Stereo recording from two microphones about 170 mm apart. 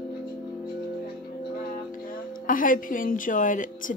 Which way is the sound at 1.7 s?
55° left (ahead or behind).